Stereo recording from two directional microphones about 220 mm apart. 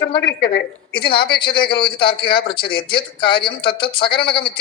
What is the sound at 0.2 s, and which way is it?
Speech, 50° left (ahead or behind).